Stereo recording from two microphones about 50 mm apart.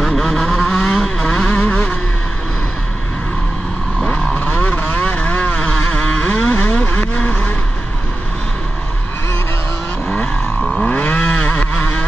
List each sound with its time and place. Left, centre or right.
0.0 s vehicle: centre
1.5 s vehicle: left
4.4 s a sound: left
5.0 s vehicle: left
10.6 s a sound: centre
10.9 s vehicle: left